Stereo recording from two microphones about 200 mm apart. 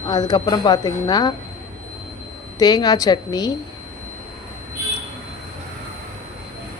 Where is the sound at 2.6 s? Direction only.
20° left (ahead or behind).